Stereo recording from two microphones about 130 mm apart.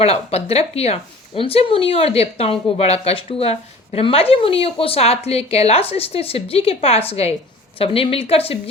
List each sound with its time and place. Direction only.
0.0 s speech: 50° left (ahead or behind)